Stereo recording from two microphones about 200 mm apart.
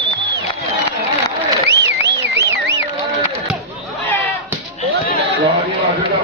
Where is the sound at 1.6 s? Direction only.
60° right (ahead or behind).